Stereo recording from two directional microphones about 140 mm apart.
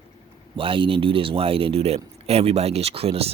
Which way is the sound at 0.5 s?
40° right (ahead or behind).